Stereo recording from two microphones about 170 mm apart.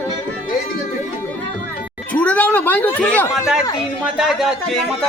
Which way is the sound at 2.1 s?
10° left (ahead or behind).